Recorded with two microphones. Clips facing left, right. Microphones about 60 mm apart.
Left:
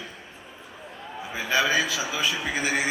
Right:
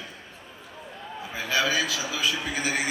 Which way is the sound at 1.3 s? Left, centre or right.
Centre.